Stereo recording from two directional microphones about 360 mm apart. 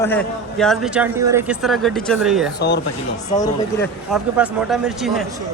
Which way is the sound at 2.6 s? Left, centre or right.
Left.